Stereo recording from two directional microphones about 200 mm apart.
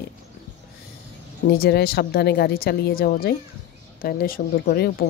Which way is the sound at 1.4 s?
55° left (ahead or behind).